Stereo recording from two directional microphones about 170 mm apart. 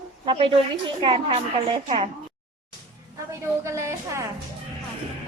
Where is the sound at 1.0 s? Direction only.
30° right (ahead or behind).